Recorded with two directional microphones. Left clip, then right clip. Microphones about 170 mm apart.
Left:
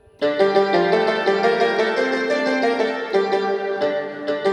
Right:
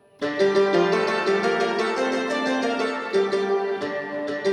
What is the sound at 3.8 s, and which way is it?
Music, 40° left (ahead or behind).